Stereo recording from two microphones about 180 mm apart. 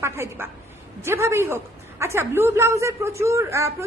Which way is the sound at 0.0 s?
15° right (ahead or behind).